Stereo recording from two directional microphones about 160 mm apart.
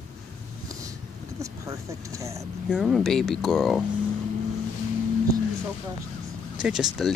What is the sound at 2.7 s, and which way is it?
Speech, centre (ahead or behind).